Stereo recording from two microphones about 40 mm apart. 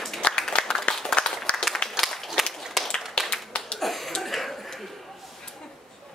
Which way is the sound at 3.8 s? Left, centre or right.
Centre.